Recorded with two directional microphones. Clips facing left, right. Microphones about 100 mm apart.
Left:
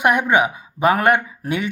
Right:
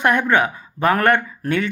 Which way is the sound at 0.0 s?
15° left (ahead or behind).